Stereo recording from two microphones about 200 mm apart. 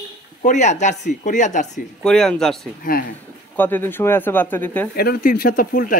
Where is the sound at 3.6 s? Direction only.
10° left (ahead or behind).